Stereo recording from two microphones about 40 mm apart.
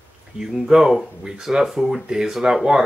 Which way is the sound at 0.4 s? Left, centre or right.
Centre.